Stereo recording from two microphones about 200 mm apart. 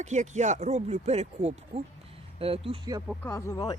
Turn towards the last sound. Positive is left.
turn(degrees=20)  # may be behind; listen again after turning